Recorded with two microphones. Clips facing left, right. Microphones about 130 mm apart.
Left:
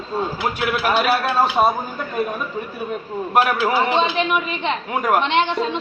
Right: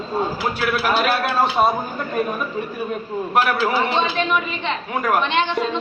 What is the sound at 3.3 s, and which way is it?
A man's voice, 10° left (ahead or behind).